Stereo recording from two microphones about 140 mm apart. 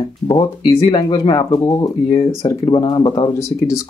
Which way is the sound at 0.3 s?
35° left (ahead or behind).